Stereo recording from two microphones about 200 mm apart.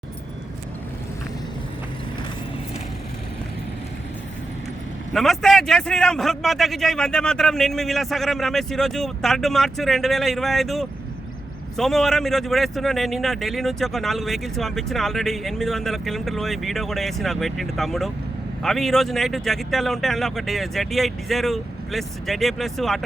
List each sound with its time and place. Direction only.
5.1 s a man's voice: centre (ahead or behind)